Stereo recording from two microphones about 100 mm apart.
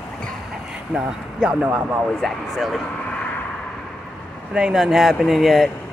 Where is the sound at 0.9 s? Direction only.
10° right (ahead or behind).